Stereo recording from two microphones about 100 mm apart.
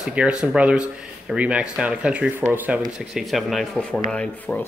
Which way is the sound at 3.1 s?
Centre (ahead or behind).